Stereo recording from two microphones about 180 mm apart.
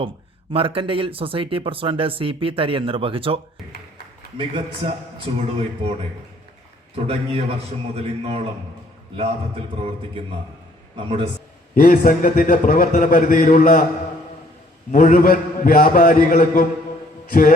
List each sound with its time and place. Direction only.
0.5 s a man's voice: 30° right (ahead or behind)
9.7 s a man's voice: 35° right (ahead or behind)
11.7 s a man's voice: 55° left (ahead or behind)
14.9 s a man's voice: 50° left (ahead or behind)